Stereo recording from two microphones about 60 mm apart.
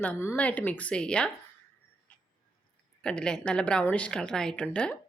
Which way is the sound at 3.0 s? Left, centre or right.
Centre.